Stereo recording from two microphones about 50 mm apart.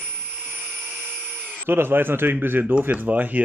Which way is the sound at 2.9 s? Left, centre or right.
Right.